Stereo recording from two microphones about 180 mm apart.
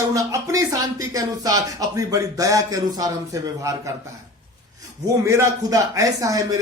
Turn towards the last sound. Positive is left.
turn(degrees=-20)  # may be behind; listen again after turning